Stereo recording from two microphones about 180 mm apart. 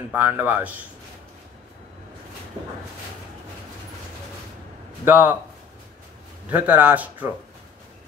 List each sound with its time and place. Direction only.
0.1 s a man's voice: 10° right (ahead or behind)
5.0 s a man's voice: 10° right (ahead or behind)
6.5 s a man's voice: 10° right (ahead or behind)